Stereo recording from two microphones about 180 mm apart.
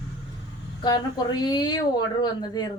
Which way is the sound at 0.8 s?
25° left (ahead or behind).